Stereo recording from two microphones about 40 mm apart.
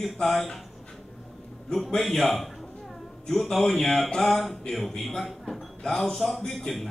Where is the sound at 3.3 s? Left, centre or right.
Centre.